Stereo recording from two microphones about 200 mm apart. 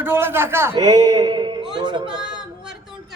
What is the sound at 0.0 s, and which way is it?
A man's voice, 10° right (ahead or behind).